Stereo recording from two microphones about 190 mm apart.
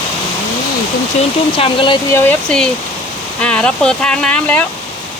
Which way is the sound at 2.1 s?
5° left (ahead or behind).